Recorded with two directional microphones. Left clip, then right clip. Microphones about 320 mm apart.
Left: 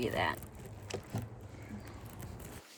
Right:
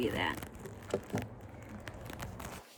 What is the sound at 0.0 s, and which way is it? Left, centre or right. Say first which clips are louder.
Speech: even; centre.